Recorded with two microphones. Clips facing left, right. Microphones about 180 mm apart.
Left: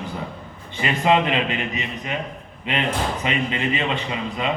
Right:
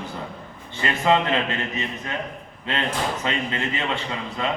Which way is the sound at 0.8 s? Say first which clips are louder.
Left 2 dB; 20° left (ahead or behind).